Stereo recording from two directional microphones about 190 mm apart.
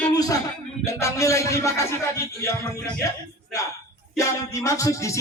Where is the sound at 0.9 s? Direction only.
15° left (ahead or behind).